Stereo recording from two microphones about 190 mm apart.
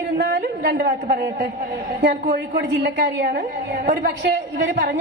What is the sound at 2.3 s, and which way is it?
A woman's voice, 60° right (ahead or behind).